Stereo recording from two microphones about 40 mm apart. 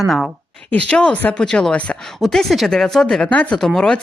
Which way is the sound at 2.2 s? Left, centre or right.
Centre.